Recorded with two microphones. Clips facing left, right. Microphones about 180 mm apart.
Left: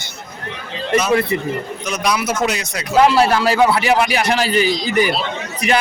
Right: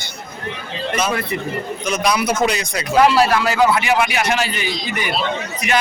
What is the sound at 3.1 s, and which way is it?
A man's voice, 30° left (ahead or behind).